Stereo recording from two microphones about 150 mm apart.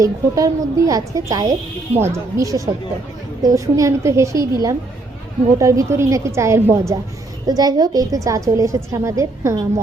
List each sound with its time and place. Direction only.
0.0 s a woman's voice: 20° right (ahead or behind)